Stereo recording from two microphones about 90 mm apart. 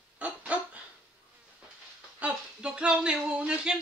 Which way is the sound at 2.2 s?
10° right (ahead or behind).